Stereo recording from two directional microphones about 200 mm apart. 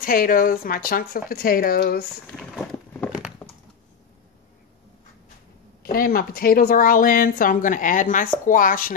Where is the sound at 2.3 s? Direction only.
5° left (ahead or behind).